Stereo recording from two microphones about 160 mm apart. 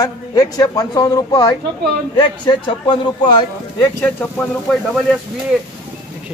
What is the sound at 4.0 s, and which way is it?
Speech, 10° left (ahead or behind).